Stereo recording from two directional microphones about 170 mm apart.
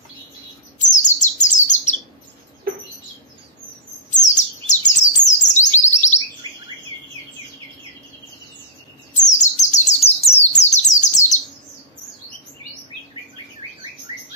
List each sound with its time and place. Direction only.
0.7 s chirp: 45° left (ahead or behind)
4.1 s bird: 45° left (ahead or behind)
9.1 s bird: 45° left (ahead or behind)